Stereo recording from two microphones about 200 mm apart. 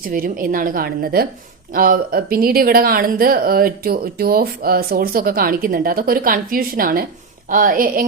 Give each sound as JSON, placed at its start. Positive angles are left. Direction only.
{"t": 0.0, "sound": "speech", "side_deg": -45}